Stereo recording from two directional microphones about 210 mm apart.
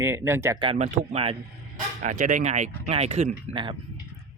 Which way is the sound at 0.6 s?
30° right (ahead or behind).